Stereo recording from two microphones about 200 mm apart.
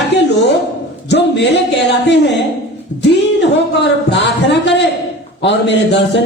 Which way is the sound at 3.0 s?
60° left (ahead or behind).